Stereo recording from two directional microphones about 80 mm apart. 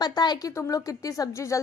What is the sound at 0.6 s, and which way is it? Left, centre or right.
Speech, left.